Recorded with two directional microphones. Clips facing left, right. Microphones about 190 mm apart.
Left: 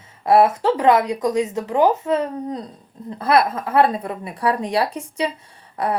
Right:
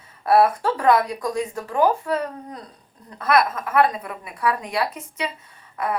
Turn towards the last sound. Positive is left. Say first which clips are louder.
# left 3 dB
turn(degrees=35)  # may be behind; listen again after turning